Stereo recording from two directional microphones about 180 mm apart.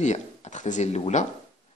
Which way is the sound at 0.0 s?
40° left (ahead or behind).